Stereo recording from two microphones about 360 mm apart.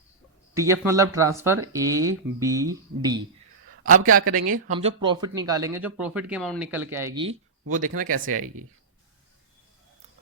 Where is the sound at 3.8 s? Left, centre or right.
Right.